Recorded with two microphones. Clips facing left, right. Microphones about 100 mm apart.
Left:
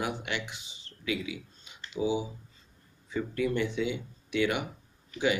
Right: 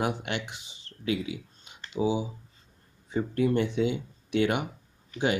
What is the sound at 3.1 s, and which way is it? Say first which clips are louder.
Speech: right 4 dB; 40° right (ahead or behind).